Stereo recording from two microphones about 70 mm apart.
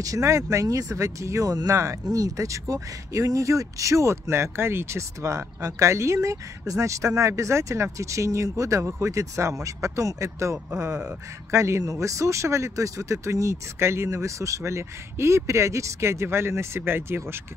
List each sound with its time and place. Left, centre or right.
0.0 s speech: right
2.1 s speech: right